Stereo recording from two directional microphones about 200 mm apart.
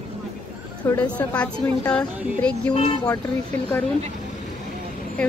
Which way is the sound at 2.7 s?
30° left (ahead or behind).